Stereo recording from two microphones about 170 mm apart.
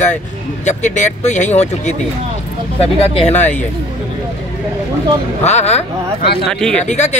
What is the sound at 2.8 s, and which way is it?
Speech, 35° left (ahead or behind).